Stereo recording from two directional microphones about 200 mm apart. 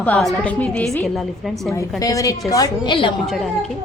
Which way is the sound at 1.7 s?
15° left (ahead or behind).